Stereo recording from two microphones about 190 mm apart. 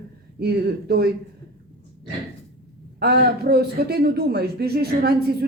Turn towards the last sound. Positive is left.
turn(degrees=-55)  # may be behind; listen again after turning